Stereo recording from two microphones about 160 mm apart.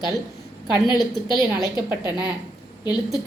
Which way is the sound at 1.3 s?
20° right (ahead or behind).